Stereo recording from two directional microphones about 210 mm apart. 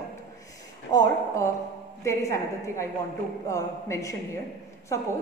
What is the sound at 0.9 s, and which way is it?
A woman's voice, 20° left (ahead or behind).